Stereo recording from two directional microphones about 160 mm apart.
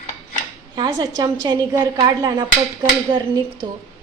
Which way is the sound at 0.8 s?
25° right (ahead or behind).